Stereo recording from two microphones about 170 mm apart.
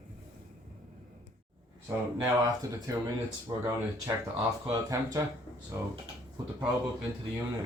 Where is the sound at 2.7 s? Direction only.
20° right (ahead or behind).